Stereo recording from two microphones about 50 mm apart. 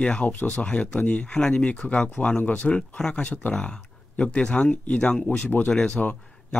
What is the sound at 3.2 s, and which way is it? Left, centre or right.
Speech, left.